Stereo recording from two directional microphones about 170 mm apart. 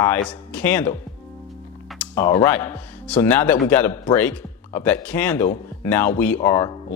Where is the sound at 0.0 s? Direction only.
10° left (ahead or behind).